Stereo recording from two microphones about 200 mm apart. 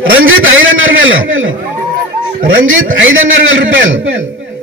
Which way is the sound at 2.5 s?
75° right (ahead or behind).